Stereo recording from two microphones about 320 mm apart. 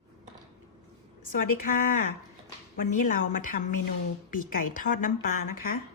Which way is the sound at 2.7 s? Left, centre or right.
Left.